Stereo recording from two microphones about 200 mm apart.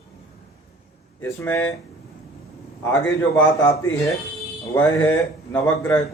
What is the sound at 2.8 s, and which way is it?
Speech, 5° left (ahead or behind).